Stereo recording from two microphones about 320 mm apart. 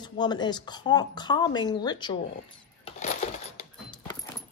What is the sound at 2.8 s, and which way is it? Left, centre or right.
Coin, left.